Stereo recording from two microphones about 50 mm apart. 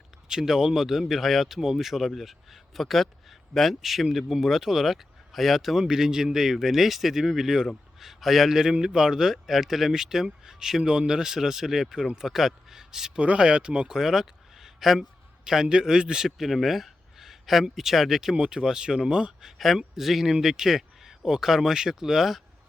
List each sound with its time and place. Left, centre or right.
0.3 s speech: centre
5.8 s a man's voice: centre
13.1 s speech: centre